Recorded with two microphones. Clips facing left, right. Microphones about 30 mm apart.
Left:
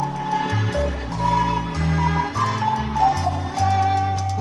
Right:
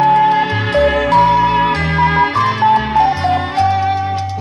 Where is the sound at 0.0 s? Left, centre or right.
Right.